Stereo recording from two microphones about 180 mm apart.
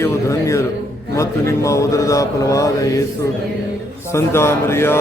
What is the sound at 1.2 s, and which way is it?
Mantra, 15° left (ahead or behind).